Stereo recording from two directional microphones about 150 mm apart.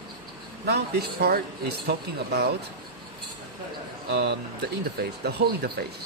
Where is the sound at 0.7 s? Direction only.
90° right.